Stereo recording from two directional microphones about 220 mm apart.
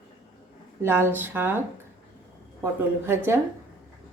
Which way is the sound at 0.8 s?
10° right (ahead or behind).